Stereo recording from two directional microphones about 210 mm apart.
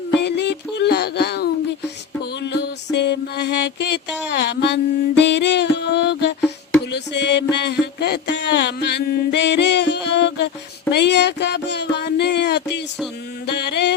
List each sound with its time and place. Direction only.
0.2 s music: 55° left (ahead or behind)
10.9 s a sound: 55° left (ahead or behind)
13.5 s music: 55° left (ahead or behind)